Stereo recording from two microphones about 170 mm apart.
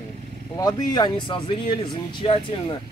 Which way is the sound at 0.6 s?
25° left (ahead or behind).